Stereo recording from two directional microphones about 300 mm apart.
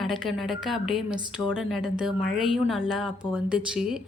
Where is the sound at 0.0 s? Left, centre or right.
Centre.